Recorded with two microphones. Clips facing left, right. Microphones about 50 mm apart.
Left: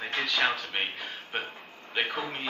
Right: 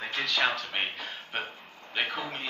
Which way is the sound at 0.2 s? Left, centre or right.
Centre.